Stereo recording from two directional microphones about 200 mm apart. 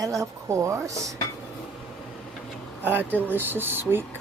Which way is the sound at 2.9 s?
10° right (ahead or behind).